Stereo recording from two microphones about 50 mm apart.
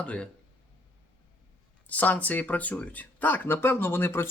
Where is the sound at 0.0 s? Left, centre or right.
Left.